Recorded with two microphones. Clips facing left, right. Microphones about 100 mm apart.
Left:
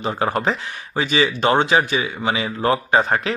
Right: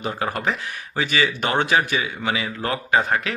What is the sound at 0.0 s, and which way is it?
Speech, 30° left (ahead or behind).